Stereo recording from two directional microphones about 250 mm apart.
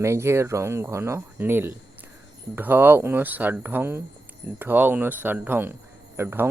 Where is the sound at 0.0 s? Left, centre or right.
Centre.